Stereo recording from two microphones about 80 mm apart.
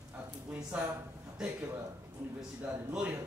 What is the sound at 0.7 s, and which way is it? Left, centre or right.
Speech, centre.